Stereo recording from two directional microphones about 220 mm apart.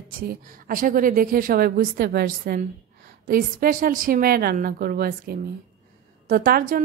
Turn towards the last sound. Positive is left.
turn(degrees=-40)  # may be behind; listen again after turning